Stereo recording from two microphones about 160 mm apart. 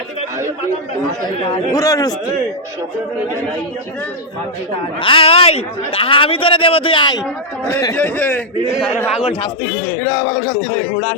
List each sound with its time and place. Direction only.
1.7 s a man's voice: 20° left (ahead or behind)
4.9 s a man's voice: 35° left (ahead or behind)
7.9 s a man's voice: 10° left (ahead or behind)
10.0 s a man's voice: 20° left (ahead or behind)